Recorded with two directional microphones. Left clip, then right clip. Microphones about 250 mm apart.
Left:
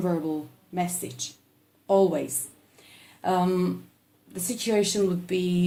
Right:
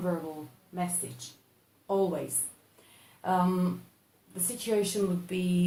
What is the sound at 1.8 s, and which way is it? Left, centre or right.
Speech, left.